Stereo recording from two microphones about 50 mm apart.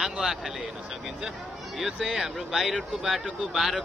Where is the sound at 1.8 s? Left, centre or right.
Centre.